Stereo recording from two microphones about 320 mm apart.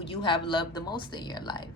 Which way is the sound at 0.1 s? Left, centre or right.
Centre.